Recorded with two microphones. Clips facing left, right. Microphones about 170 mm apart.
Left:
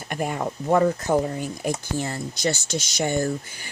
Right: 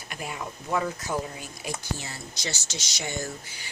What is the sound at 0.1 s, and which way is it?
Speech, 50° left (ahead or behind).